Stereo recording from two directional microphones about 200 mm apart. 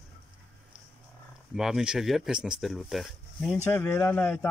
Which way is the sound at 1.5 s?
Centre (ahead or behind).